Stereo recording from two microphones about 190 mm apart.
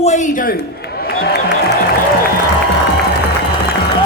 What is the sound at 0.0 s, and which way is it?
Speech, 40° left (ahead or behind).